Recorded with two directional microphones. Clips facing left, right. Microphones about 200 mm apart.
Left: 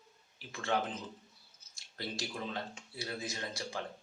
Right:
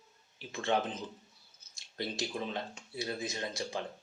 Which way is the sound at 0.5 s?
20° right (ahead or behind).